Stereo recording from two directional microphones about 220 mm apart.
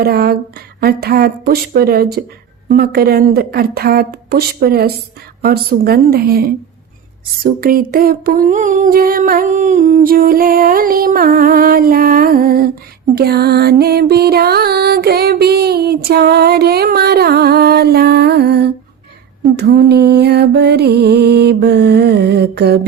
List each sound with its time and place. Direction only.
0.0 s music: 45° right (ahead or behind)
7.4 s a sound: 40° right (ahead or behind)
13.1 s music: 45° right (ahead or behind)